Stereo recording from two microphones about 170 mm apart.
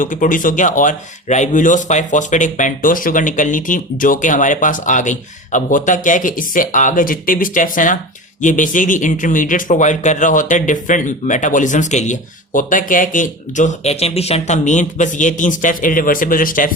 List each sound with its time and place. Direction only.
0.0 s a man's voice: 50° left (ahead or behind)